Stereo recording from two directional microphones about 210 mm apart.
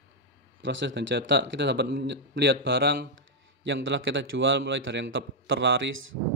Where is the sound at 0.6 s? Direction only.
55° right (ahead or behind).